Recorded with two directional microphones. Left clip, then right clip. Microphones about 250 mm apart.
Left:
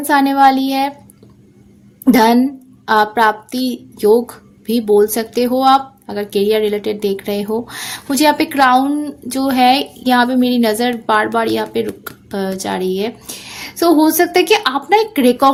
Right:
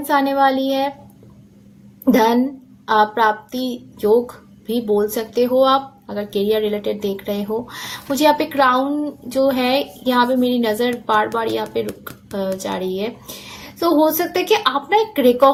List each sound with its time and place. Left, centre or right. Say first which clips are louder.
0.1 s speech: left 5 dB; left
2.1 s speech: left 4 dB; left